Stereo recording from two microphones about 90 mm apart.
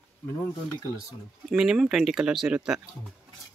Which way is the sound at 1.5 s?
5° right (ahead or behind).